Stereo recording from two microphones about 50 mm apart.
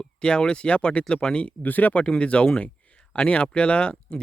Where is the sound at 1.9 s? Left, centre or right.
Centre.